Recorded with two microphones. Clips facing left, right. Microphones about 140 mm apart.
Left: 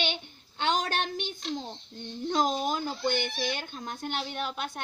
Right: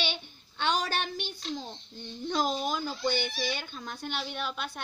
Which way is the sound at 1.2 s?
20° left (ahead or behind).